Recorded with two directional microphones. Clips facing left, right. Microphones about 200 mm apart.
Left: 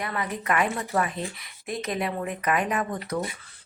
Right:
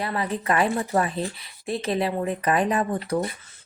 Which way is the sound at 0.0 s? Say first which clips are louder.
Right 4 dB; 30° right (ahead or behind).